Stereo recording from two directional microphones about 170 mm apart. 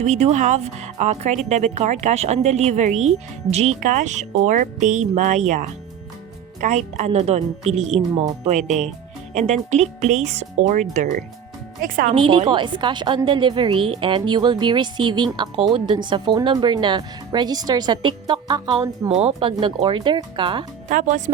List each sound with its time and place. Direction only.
0.0 s speech: 40° right (ahead or behind)
11.8 s speech: 55° right (ahead or behind)
12.1 s a woman's voice: 30° right (ahead or behind)
19.0 s a woman's voice: 35° right (ahead or behind)
20.8 s speech: 50° right (ahead or behind)